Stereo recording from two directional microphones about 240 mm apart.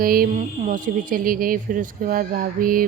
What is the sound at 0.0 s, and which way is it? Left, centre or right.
Speech, right.